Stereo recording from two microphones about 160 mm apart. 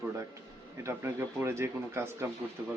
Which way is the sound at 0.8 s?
15° right (ahead or behind).